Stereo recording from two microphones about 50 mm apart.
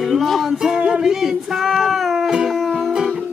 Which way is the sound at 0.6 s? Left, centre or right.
Centre.